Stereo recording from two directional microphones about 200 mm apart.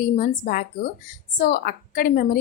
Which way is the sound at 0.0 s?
45° left (ahead or behind).